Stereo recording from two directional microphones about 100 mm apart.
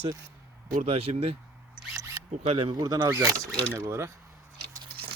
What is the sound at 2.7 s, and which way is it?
Speech, 40° right (ahead or behind).